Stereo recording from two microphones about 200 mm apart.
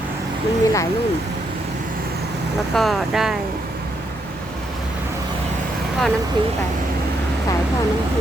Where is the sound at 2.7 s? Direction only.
Centre (ahead or behind).